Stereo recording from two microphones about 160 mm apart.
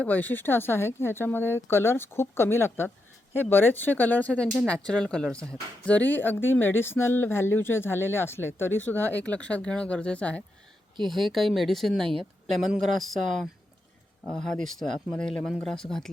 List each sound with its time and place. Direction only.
0.0 s speech: 10° left (ahead or behind)